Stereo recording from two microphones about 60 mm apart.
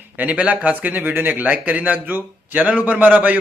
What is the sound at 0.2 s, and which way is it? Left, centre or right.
A man's voice, right.